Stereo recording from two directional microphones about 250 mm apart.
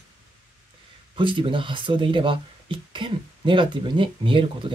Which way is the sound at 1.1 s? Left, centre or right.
Centre.